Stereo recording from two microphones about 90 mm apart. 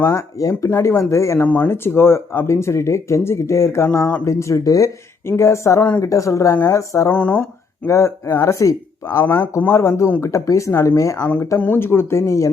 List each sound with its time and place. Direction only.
0.0 s speech: 35° left (ahead or behind)
7.1 s speech: 20° left (ahead or behind)
7.9 s speech: 35° left (ahead or behind)
11.6 s speech: 25° left (ahead or behind)